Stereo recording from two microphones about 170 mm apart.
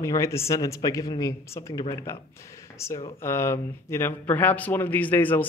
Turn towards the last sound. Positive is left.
turn(degrees=10)  # may be behind; listen again after turning